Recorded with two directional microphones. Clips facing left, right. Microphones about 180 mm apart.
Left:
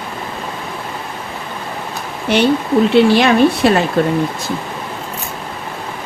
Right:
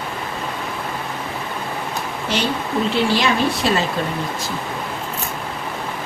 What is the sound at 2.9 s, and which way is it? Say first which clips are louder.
Speech: left 8 dB; 60° left (ahead or behind).